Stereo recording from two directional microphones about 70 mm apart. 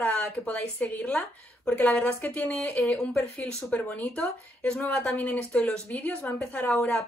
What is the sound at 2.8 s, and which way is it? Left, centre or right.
Speech, centre.